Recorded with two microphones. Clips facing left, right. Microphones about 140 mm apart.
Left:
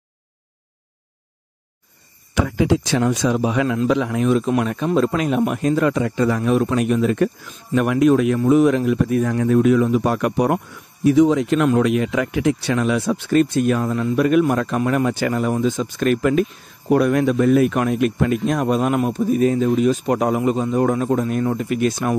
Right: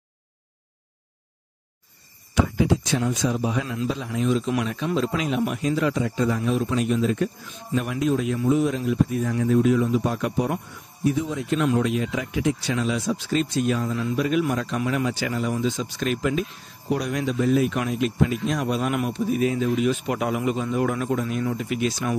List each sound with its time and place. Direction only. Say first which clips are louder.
2.3 s a man's voice: left 3 dB; 85° left; by 10.6 s 65° left (ahead or behind)
11.1 s a man's voice: left 10 dB; 90° left; by 22.1 s 50° left (ahead or behind)